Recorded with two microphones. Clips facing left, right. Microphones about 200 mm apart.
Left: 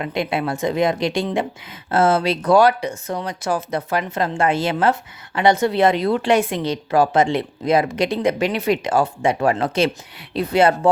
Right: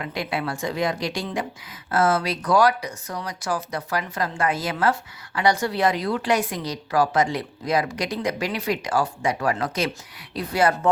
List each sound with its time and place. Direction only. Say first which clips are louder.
0.0 s speech: left 5 dB; 25° left (ahead or behind)